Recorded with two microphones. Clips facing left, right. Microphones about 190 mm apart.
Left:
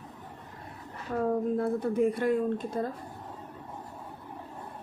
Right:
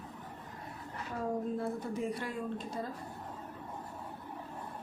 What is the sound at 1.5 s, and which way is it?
A woman's voice, 55° left (ahead or behind).